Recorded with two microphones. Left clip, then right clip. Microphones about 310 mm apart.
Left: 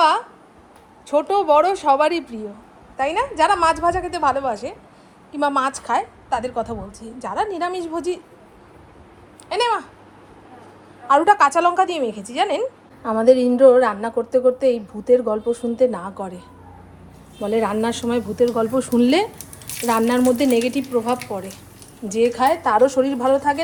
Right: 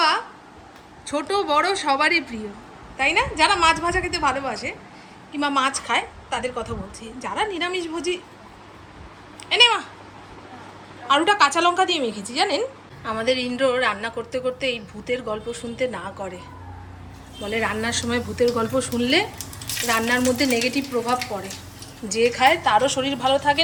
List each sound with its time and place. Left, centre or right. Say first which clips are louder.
1.0 s a woman's voice: left 6 dB; centre
9.5 s a woman's voice: right 4 dB; centre
11.1 s a woman's voice: left 3 dB; centre
17.5 s a woman's voice: left 3 dB; centre